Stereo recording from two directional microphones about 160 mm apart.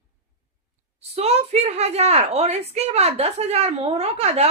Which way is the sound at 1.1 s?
40° right (ahead or behind).